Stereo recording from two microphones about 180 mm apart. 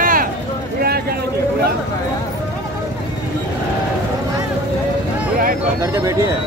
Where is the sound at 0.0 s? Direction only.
50° right (ahead or behind).